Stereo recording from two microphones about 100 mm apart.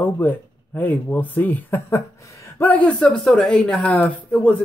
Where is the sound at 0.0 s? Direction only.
20° left (ahead or behind).